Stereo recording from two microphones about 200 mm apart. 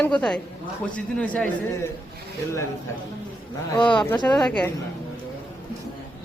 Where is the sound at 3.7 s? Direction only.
25° left (ahead or behind).